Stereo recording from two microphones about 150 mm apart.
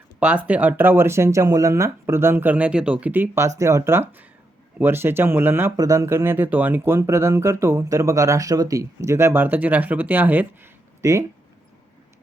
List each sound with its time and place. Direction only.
0.2 s speech: 10° right (ahead or behind)